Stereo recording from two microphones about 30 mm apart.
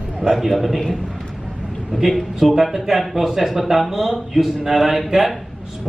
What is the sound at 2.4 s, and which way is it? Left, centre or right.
A man's voice, centre.